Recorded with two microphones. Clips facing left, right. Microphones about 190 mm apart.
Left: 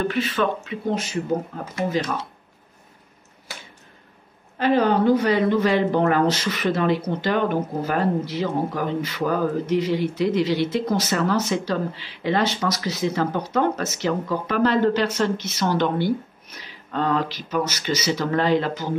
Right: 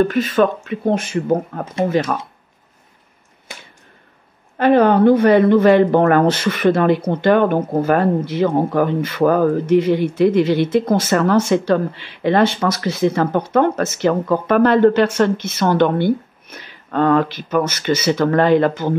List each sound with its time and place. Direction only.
0.0 s speech: 40° right (ahead or behind)
4.6 s speech: 55° right (ahead or behind)